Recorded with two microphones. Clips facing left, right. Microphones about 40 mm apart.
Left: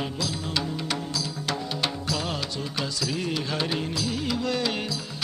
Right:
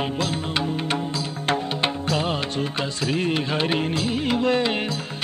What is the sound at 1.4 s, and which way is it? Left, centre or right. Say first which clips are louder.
Music: right 7 dB; right.